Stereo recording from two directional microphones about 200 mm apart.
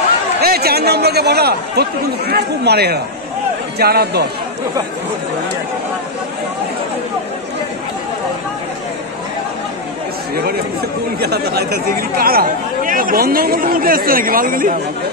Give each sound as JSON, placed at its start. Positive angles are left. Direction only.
{"t": 0.4, "sound": "speech", "side_deg": -50}
{"t": 11.1, "sound": "speech", "side_deg": -55}